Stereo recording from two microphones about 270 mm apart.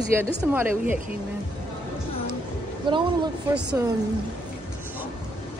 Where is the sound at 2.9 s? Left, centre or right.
Centre.